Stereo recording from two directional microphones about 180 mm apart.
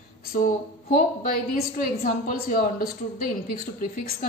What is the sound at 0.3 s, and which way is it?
A woman's voice, 45° left (ahead or behind).